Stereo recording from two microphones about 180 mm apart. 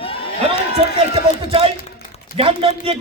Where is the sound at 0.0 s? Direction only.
30° left (ahead or behind).